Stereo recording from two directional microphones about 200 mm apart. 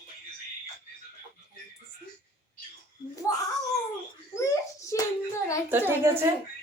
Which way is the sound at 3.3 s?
20° left (ahead or behind).